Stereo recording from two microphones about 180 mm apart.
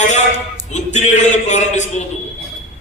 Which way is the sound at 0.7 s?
40° left (ahead or behind).